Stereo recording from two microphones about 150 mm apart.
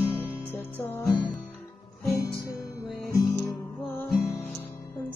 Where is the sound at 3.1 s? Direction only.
25° left (ahead or behind).